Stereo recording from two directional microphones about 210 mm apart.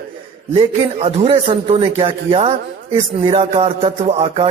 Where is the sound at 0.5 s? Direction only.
25° right (ahead or behind).